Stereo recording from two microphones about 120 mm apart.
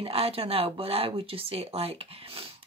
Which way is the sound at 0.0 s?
55° right (ahead or behind).